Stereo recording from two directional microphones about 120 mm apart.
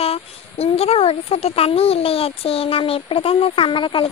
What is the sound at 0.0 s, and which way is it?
Speech, 55° left (ahead or behind).